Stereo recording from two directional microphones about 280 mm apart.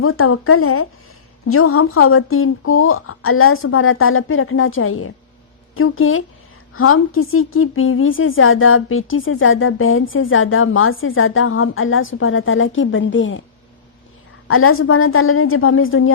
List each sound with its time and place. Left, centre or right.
0.0 s a woman's voice: left
14.4 s a woman's voice: left